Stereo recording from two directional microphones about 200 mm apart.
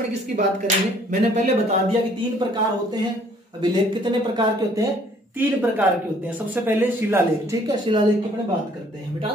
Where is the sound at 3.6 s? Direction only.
20° right (ahead or behind).